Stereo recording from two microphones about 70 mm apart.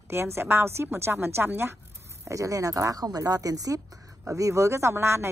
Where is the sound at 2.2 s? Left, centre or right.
Right.